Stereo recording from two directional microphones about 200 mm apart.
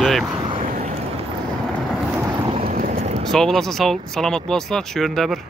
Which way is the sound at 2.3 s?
25° right (ahead or behind).